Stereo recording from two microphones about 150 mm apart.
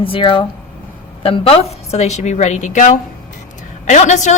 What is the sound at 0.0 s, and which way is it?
A woman's voice, 35° left (ahead or behind).